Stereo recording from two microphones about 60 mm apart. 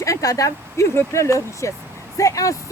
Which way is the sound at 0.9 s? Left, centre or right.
Left.